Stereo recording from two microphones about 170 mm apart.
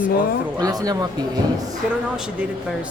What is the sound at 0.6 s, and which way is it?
Speech, 20° right (ahead or behind).